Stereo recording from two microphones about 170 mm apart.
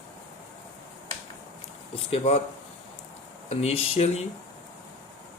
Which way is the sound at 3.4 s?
40° left (ahead or behind).